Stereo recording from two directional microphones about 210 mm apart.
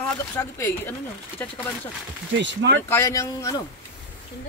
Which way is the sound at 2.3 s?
55° right (ahead or behind).